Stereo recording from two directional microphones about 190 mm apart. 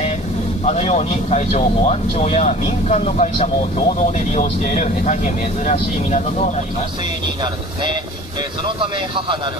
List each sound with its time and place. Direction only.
0.7 s speech: 30° left (ahead or behind)